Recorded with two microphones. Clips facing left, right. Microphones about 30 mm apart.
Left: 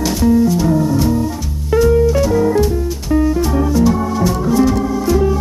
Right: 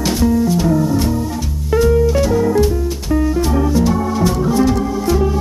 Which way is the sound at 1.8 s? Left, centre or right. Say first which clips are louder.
Left 1 dB; centre.